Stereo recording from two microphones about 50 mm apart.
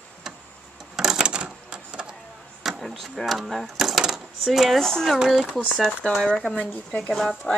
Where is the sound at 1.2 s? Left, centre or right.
Right.